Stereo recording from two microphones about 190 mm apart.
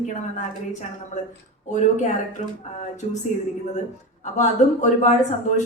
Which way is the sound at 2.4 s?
35° left (ahead or behind).